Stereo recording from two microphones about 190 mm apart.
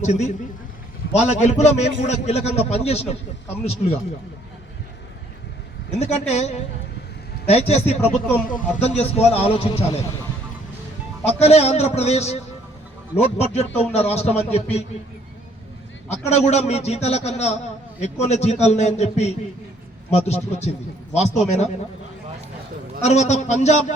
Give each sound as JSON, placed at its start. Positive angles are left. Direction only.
{"t": 0.0, "sound": "a man's voice", "side_deg": 40}
{"t": 6.0, "sound": "a man's voice", "side_deg": 35}
{"t": 11.3, "sound": "a man's voice", "side_deg": 35}
{"t": 16.0, "sound": "a man's voice", "side_deg": 35}
{"t": 23.0, "sound": "a man's voice", "side_deg": 35}